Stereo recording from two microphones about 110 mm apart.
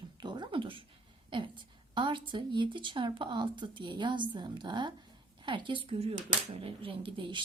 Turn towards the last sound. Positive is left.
turn(degrees=-50)  # may be behind; listen again after turning